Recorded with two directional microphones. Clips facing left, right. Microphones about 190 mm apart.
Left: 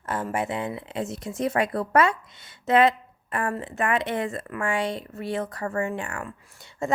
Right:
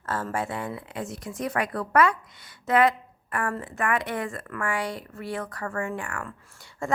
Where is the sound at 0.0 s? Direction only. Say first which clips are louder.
Left 2 dB; 15° left (ahead or behind).